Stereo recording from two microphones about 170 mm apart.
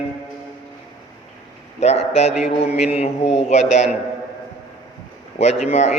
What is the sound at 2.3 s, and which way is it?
Speech, 5° right (ahead or behind).